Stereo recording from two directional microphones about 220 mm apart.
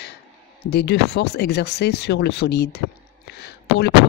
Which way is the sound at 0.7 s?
45° left (ahead or behind).